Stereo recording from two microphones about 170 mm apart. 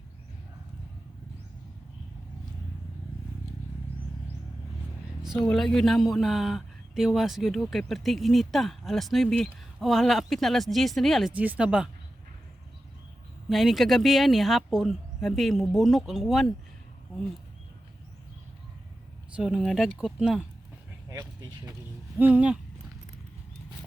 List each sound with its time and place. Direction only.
5.2 s a man's voice: centre (ahead or behind)
13.5 s a man's voice: centre (ahead or behind)
19.4 s a man's voice: centre (ahead or behind)
21.1 s vehicle: 20° right (ahead or behind)
22.2 s speech: 10° right (ahead or behind)